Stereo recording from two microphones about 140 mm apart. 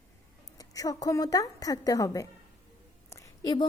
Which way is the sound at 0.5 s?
25° left (ahead or behind).